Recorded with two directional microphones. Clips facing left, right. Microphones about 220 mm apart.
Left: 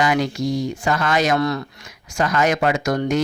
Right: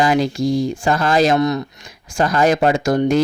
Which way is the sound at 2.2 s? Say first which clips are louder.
Right 4 dB; 30° right (ahead or behind).